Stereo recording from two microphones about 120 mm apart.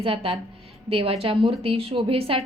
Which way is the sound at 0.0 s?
50° right (ahead or behind).